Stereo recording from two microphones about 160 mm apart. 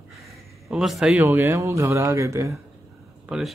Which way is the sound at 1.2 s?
15° right (ahead or behind).